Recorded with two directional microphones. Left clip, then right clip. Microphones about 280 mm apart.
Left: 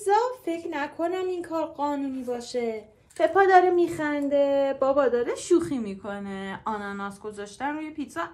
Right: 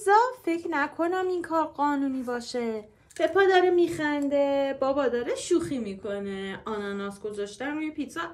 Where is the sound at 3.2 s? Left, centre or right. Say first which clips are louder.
Left 3 dB; centre.